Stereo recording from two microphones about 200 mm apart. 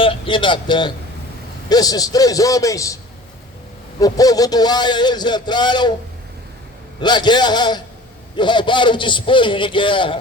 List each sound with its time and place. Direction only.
0.0 s a man's voice: 25° left (ahead or behind)
4.0 s a man's voice: 20° left (ahead or behind)
7.0 s a man's voice: 20° left (ahead or behind)